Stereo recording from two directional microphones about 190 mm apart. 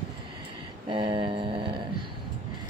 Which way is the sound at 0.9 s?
25° right (ahead or behind).